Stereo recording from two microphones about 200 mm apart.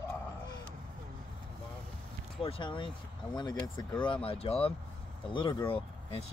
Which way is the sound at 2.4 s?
25° left (ahead or behind).